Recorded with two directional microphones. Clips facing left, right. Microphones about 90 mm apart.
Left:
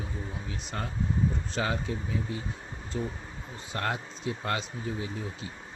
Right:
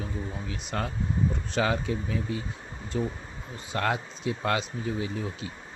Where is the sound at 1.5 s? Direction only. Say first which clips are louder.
Right 4 dB; 90° right.